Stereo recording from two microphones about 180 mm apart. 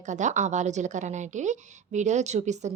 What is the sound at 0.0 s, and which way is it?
A woman's voice, 40° right (ahead or behind).